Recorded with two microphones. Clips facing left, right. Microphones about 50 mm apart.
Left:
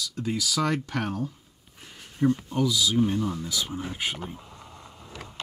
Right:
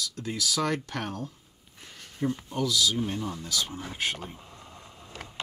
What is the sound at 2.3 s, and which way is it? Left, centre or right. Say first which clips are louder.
Speech: left 7 dB; centre.